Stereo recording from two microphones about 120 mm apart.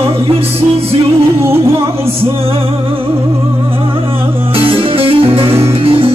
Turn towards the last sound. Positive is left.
turn(degrees=-50)  # may be behind; listen again after turning